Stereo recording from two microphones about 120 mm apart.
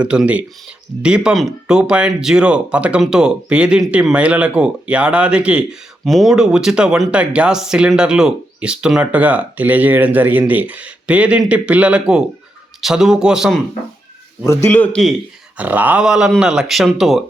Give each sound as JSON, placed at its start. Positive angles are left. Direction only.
{"t": 0.0, "sound": "speech", "side_deg": -10}
{"t": 14.4, "sound": "a man's voice", "side_deg": 20}
{"t": 15.5, "sound": "speech", "side_deg": -15}